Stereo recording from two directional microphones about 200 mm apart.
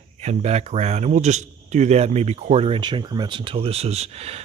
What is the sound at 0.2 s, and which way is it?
Speech, 35° right (ahead or behind).